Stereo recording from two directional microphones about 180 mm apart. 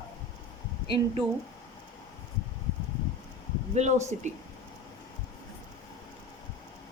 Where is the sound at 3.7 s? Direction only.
40° right (ahead or behind).